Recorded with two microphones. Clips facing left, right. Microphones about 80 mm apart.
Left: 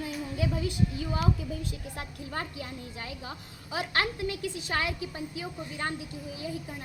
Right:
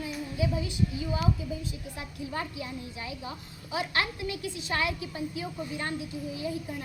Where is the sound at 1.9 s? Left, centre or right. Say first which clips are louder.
Right 2 dB; left.